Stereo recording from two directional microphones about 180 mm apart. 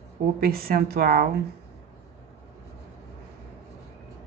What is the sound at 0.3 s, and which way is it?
Speech, 60° right (ahead or behind).